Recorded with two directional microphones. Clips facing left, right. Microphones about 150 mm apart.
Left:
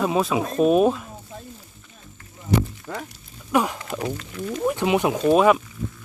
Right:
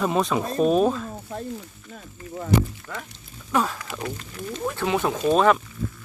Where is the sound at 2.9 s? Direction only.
25° left (ahead or behind).